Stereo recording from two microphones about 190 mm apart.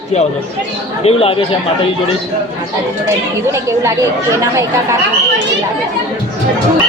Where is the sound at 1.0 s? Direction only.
30° left (ahead or behind).